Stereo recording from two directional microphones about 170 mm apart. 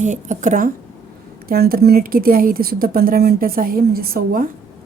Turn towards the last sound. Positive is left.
turn(degrees=-55)  # may be behind; listen again after turning